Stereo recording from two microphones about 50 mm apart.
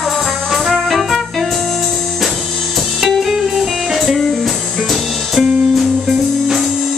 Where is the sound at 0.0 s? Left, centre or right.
Centre.